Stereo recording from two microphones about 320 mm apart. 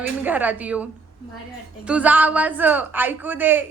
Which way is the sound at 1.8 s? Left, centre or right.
Centre.